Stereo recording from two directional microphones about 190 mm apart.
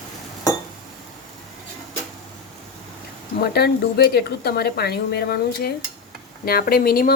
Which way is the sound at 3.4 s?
55° left (ahead or behind).